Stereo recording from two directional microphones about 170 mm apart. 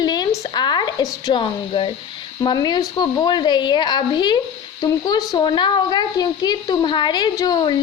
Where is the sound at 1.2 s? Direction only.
30° left (ahead or behind).